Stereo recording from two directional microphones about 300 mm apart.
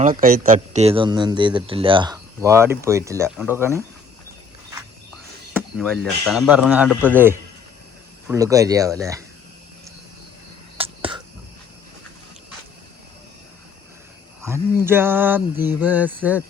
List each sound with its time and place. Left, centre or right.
0.0 s speech: right; by 3.8 s centre
5.5 s speech: centre
10.8 s a sound: centre
14.4 s speech: centre